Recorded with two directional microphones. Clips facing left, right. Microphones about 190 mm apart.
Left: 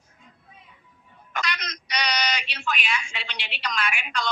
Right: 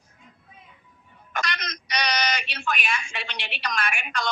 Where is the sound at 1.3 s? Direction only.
50° right (ahead or behind).